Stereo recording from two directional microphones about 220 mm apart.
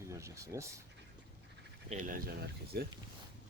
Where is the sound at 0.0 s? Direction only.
15° right (ahead or behind).